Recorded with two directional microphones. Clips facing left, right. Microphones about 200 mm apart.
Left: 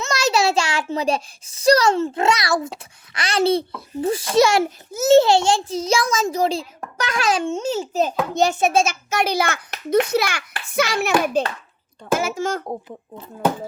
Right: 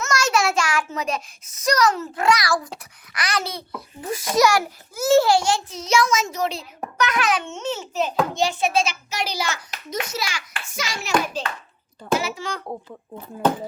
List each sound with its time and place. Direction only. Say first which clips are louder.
0.1 s a child's voice: left 3 dB; 35° left (ahead or behind)
13.4 s speech: even; 10° left (ahead or behind)